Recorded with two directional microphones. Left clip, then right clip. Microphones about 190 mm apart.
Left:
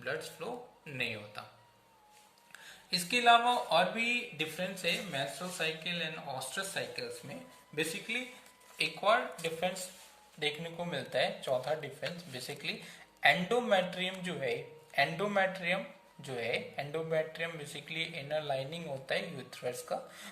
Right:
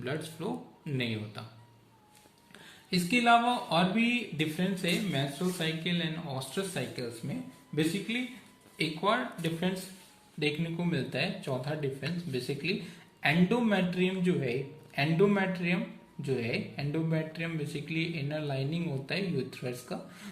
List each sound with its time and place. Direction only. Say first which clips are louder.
0.0 s speech: right 2 dB; centre (ahead or behind)
2.9 s speech: right 1 dB; 20° left (ahead or behind)